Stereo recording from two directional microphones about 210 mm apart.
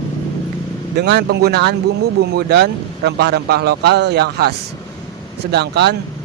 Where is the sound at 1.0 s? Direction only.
55° right (ahead or behind).